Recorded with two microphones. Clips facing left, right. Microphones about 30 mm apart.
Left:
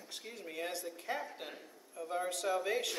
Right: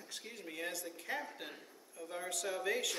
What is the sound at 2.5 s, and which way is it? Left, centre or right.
Speech, left.